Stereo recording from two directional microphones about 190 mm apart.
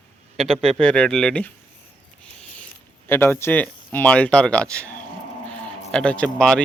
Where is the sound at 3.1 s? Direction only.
10° left (ahead or behind).